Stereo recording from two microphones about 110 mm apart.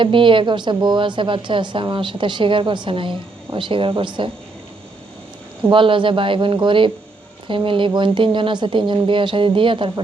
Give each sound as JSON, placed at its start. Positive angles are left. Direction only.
{"t": 0.0, "sound": "a woman's voice", "side_deg": -50}
{"t": 5.6, "sound": "a woman's voice", "side_deg": -50}